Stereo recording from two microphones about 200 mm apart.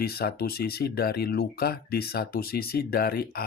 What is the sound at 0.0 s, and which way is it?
Speech, 50° left (ahead or behind).